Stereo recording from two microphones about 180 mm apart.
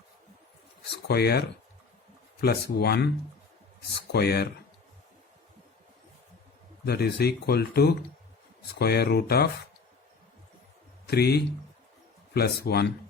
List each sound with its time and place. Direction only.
1.0 s speech: 60° left (ahead or behind)
4.1 s speech: 60° left (ahead or behind)
6.8 s speech: 60° left (ahead or behind)
11.0 s speech: 60° left (ahead or behind)